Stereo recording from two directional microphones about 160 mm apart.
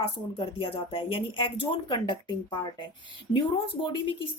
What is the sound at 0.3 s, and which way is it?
A woman's voice, 35° left (ahead or behind).